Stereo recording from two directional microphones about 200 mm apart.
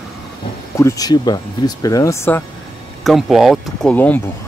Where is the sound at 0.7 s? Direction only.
15° left (ahead or behind).